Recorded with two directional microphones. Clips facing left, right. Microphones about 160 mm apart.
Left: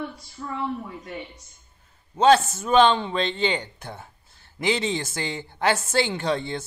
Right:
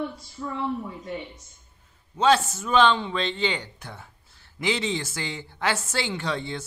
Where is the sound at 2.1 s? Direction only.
50° left (ahead or behind).